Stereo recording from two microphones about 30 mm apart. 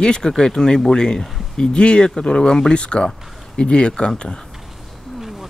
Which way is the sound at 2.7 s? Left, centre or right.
Left.